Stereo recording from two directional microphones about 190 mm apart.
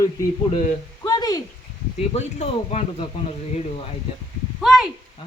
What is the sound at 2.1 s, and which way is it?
Speech, 35° left (ahead or behind).